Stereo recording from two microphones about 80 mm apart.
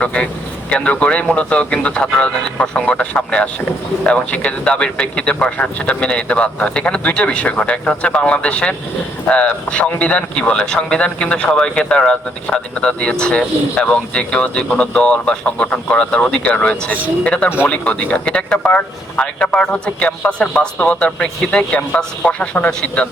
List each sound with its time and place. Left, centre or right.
0.0 s speech: centre